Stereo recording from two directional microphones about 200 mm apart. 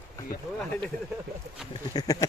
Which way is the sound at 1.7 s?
20° left (ahead or behind).